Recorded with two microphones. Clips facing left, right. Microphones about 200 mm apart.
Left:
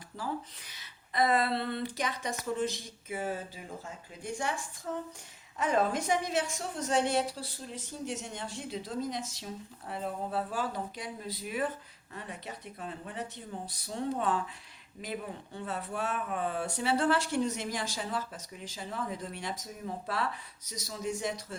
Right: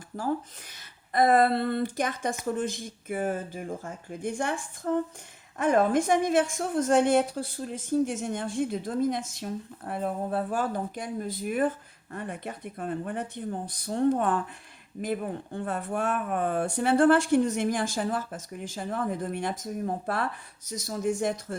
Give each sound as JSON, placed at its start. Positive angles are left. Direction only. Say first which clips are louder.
{"t": 0.7, "sound": "speech", "louder": "right 7 dB", "side_deg": -50}